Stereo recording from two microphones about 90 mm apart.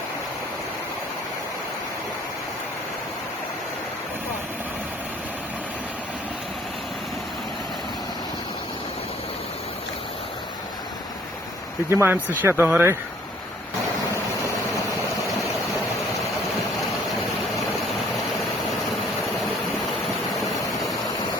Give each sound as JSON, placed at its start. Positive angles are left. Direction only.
{"t": 11.9, "sound": "speech", "side_deg": -25}